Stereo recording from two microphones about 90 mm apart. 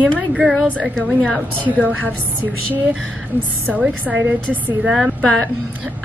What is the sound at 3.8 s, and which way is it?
Speech, 15° right (ahead or behind).